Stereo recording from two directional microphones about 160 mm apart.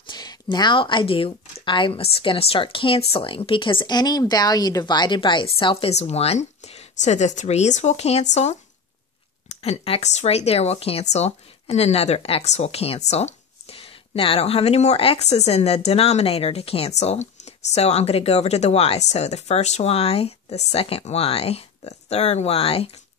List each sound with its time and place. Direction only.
0.0 s speech: 25° left (ahead or behind)
9.5 s speech: 40° left (ahead or behind)